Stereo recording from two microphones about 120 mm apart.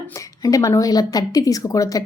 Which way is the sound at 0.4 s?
30° left (ahead or behind).